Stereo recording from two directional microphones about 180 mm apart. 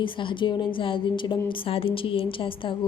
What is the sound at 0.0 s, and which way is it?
A woman's voice, 25° left (ahead or behind).